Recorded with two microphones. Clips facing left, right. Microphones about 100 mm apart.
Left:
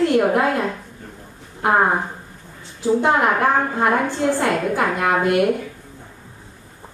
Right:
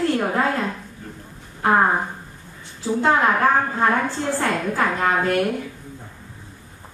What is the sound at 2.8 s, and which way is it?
Speech, 20° left (ahead or behind).